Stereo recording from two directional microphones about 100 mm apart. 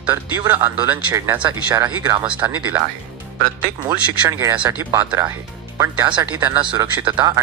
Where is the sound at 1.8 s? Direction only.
40° right (ahead or behind).